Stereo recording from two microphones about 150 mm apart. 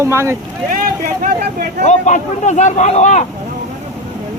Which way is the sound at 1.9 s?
55° left (ahead or behind).